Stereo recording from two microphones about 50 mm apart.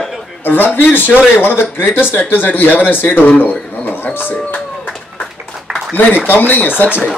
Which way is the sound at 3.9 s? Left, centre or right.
Left.